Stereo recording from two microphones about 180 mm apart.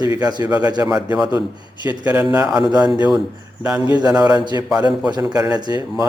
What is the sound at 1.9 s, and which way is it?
Speech, 10° right (ahead or behind).